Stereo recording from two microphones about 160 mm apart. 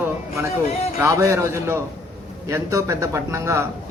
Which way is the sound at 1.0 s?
15° right (ahead or behind).